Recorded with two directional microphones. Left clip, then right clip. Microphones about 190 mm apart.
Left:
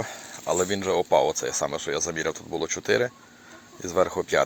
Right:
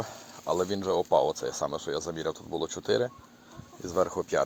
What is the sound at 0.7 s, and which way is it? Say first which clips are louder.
Speech: left 4 dB; 10° left (ahead or behind).